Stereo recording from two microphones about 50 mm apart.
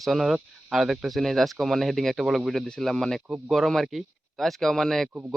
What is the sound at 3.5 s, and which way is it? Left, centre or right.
Speech, centre.